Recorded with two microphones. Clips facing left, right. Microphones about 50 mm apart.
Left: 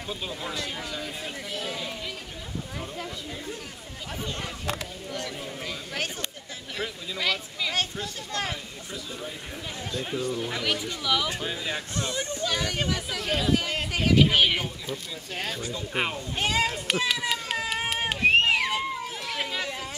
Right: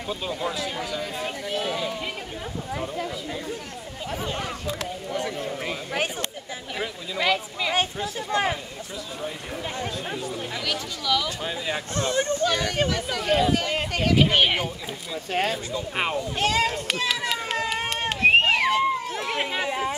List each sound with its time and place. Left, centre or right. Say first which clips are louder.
0.1 s speech: right 5 dB; centre
1.2 s speech: right 6 dB; right
5.6 s speech: right 4 dB; right
9.9 s speech: left 1 dB; centre
10.6 s speech: even; centre
11.4 s speech: right 3 dB; centre
11.9 s speech: right 7 dB; right
12.4 s speech: right 4 dB; centre
16.3 s run: right 2 dB; centre
18.3 s a sound: right 4 dB; centre
19.2 s a sound: right 4 dB; right